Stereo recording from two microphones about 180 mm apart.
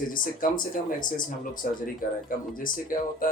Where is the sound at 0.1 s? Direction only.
50° left (ahead or behind).